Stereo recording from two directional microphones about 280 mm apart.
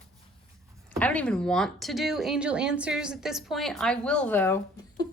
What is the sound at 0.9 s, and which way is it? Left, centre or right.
A woman's voice, centre.